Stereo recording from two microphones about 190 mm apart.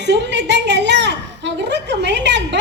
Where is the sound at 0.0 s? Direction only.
65° right (ahead or behind).